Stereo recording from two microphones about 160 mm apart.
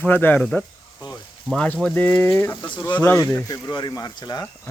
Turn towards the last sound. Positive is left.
turn(degrees=25)  # may be behind; listen again after turning